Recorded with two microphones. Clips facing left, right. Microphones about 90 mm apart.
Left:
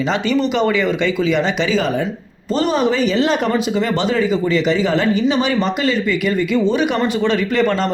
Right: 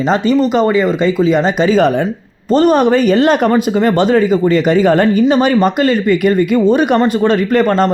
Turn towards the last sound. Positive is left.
turn(degrees=-45)  # may be behind; listen again after turning